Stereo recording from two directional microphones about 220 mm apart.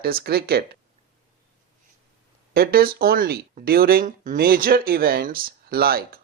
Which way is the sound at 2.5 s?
45° right (ahead or behind).